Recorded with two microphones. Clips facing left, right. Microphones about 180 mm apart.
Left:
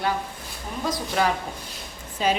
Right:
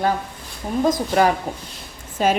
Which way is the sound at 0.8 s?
45° right (ahead or behind).